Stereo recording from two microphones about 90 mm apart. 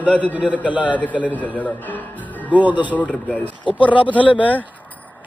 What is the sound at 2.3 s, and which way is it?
Music, 20° left (ahead or behind).